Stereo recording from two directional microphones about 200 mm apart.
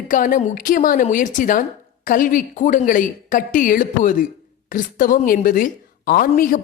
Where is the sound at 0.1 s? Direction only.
40° left (ahead or behind).